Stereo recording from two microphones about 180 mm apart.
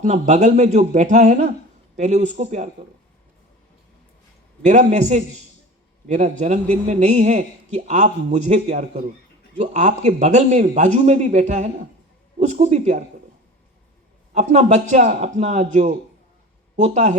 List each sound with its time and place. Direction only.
0.0 s a man's voice: 40° right (ahead or behind)
4.6 s a man's voice: 40° right (ahead or behind)
14.3 s a man's voice: 40° right (ahead or behind)